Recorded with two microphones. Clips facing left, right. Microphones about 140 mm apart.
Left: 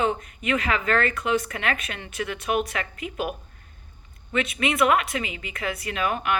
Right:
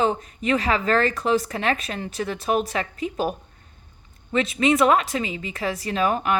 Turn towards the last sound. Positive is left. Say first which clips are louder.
# right 4 dB
turn(degrees=-35)  # may be behind; listen again after turning